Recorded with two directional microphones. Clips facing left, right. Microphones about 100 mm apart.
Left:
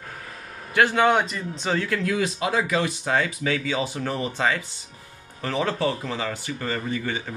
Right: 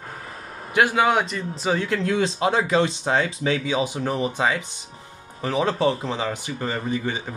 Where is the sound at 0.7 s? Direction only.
20° right (ahead or behind).